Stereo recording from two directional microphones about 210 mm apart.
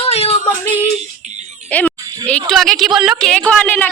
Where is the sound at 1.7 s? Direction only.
5° left (ahead or behind).